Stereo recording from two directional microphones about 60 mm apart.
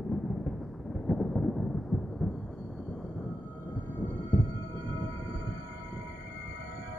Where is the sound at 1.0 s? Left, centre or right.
Centre.